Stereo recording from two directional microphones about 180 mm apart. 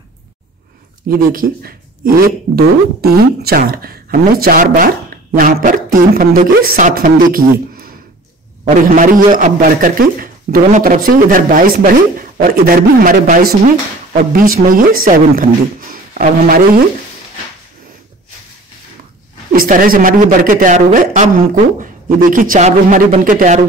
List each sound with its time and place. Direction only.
1.0 s speech: 50° right (ahead or behind)
8.9 s speech: 45° right (ahead or behind)
19.5 s speech: 55° right (ahead or behind)